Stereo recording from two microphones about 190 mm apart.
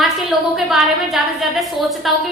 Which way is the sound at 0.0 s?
Centre (ahead or behind).